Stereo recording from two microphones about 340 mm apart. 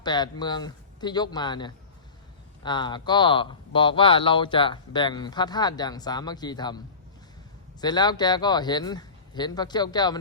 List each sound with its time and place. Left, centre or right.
0.0 s speech: centre